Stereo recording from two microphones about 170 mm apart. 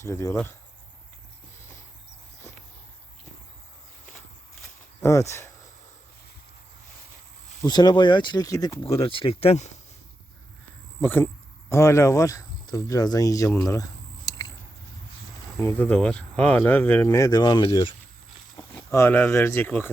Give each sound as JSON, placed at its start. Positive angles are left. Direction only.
{"t": 0.0, "sound": "speech", "side_deg": 15}
{"t": 7.6, "sound": "speech", "side_deg": 25}
{"t": 8.8, "sound": "speech", "side_deg": 35}
{"t": 11.0, "sound": "speech", "side_deg": 10}
{"t": 15.5, "sound": "speech", "side_deg": 10}
{"t": 18.5, "sound": "speech", "side_deg": 15}